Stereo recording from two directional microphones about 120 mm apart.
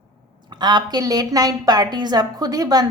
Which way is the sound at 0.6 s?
35° right (ahead or behind).